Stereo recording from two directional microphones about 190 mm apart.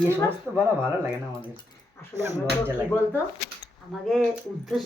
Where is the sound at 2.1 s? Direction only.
15° right (ahead or behind).